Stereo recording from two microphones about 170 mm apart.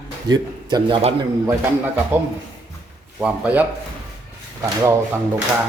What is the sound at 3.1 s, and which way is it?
A man's voice, 10° right (ahead or behind).